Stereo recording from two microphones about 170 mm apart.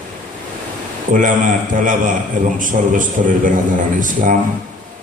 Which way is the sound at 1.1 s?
50° right (ahead or behind).